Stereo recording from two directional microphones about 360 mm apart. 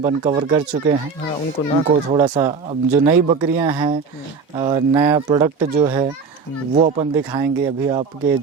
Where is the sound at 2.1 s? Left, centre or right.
Centre.